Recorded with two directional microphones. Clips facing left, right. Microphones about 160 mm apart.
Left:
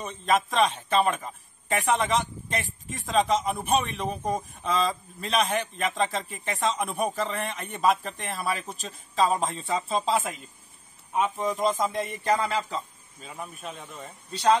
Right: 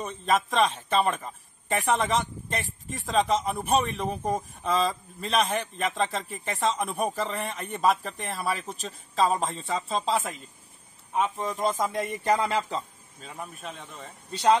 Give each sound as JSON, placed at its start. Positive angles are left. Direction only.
{"t": 0.0, "sound": "speech", "side_deg": 0}
{"t": 12.2, "sound": "speech", "side_deg": -15}
{"t": 13.2, "sound": "speech", "side_deg": 5}